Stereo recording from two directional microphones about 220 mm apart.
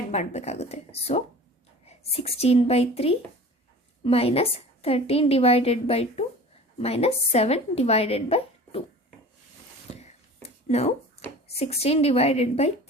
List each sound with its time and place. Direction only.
0.1 s a woman's voice: 30° left (ahead or behind)
9.9 s a sound: 30° left (ahead or behind)
11.4 s a woman's voice: 30° left (ahead or behind)